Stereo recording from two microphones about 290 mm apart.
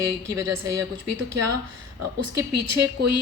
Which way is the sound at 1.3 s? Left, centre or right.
Right.